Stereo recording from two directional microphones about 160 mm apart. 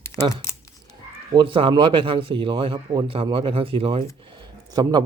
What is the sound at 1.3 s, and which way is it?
Speech, 30° right (ahead or behind).